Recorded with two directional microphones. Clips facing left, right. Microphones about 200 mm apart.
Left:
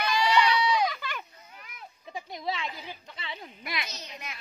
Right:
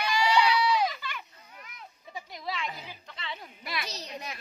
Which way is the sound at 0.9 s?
50° left (ahead or behind).